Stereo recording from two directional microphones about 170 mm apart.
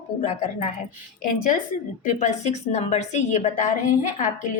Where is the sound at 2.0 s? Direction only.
45° left (ahead or behind).